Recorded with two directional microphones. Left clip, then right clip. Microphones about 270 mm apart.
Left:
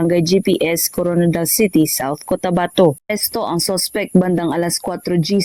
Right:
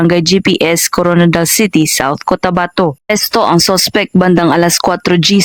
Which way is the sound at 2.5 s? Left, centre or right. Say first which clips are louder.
Right 1 dB; right.